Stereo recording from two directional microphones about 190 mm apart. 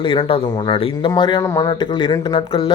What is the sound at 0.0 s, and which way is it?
Speech, 25° left (ahead or behind).